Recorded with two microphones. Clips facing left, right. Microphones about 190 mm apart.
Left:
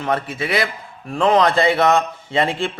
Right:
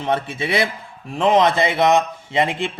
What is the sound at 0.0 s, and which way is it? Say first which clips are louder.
Speech: even; 25° right (ahead or behind).